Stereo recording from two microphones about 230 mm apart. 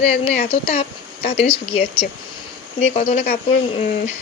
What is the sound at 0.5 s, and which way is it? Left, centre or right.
Speech, left.